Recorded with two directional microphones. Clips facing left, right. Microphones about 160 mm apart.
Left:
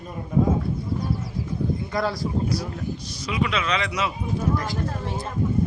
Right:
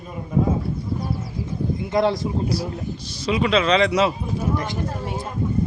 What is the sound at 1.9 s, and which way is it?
A man's voice, 20° right (ahead or behind).